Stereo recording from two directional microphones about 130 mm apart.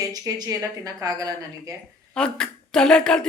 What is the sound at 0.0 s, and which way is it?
A woman's voice, 30° right (ahead or behind).